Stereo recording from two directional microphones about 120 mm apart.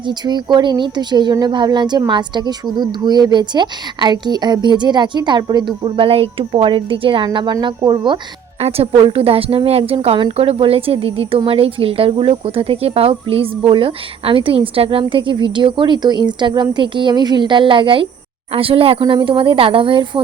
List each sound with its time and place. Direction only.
0.1 s speech: 40° right (ahead or behind)
8.6 s a woman's voice: 55° right (ahead or behind)